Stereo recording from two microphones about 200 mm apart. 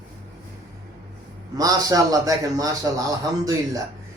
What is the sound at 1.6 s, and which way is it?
A man's voice, 20° right (ahead or behind).